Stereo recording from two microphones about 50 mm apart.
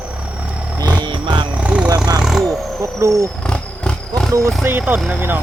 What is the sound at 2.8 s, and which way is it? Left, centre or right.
Vehicle, right.